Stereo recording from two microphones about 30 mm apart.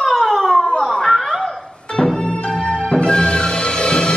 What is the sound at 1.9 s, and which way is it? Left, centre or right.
Music, left.